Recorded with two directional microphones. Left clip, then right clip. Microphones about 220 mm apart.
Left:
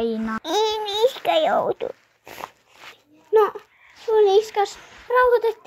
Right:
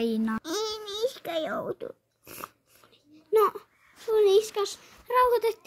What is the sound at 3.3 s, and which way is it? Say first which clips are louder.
A woman's voice: left 5 dB; 45° right (ahead or behind).